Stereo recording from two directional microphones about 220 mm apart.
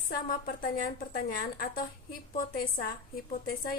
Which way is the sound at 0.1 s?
40° left (ahead or behind).